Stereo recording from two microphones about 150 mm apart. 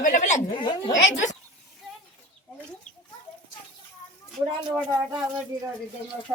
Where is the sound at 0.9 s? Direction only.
55° left (ahead or behind).